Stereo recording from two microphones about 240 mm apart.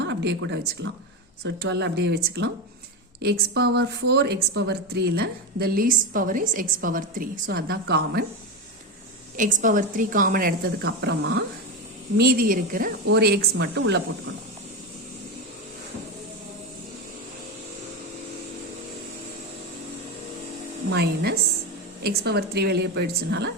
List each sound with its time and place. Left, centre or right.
0.0 s a woman's voice: right
9.4 s a woman's voice: right
20.9 s a woman's voice: right